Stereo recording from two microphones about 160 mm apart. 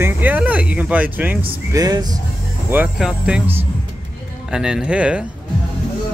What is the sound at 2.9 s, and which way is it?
Speech, 5° right (ahead or behind).